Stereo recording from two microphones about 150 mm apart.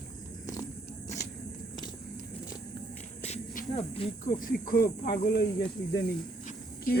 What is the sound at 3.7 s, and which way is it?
Speech, 40° left (ahead or behind).